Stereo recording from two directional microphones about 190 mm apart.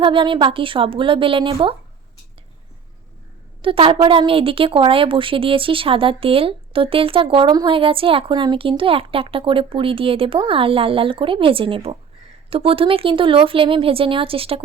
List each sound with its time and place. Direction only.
0.0 s a woman's voice: 25° right (ahead or behind)
3.6 s a woman's voice: 25° right (ahead or behind)